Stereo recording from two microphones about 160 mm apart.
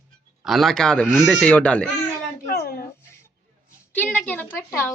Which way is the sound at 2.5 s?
75° left (ahead or behind).